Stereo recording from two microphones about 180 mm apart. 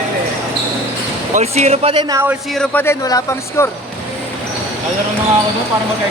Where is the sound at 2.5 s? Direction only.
10° left (ahead or behind).